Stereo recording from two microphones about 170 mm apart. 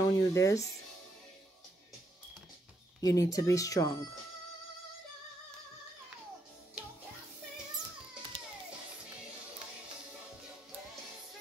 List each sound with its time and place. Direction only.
0.0 s speech: 20° left (ahead or behind)
3.0 s speech: 20° left (ahead or behind)